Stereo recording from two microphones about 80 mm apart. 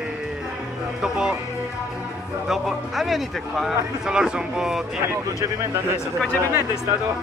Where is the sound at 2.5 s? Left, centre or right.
Centre.